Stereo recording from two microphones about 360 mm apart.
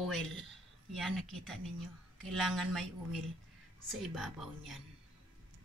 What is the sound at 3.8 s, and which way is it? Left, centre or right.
Speech, centre.